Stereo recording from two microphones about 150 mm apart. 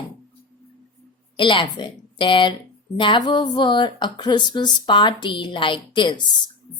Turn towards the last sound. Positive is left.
turn(degrees=30)  # may be behind; listen again after turning